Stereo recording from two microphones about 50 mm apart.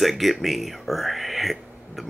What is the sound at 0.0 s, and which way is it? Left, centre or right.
Speech, centre.